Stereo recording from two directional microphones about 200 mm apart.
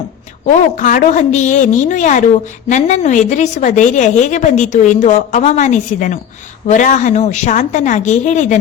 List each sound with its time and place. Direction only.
0.8 s a woman's voice: 40° left (ahead or behind)